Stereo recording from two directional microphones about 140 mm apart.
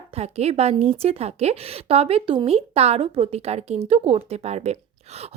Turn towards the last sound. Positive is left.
turn(degrees=-50)  # may be behind; listen again after turning